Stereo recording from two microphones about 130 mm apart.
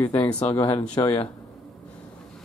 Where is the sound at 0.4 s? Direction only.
45° left (ahead or behind).